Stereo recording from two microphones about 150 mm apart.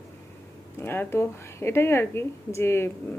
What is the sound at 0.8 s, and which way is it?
A woman's voice, 15° left (ahead or behind).